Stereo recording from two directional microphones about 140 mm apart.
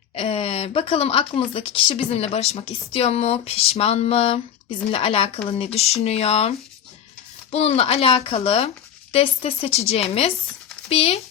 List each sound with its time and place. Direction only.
0.1 s a woman's voice: 40° left (ahead or behind)